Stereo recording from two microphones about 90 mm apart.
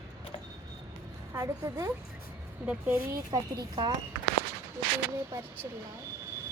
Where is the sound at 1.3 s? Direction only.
30° right (ahead or behind).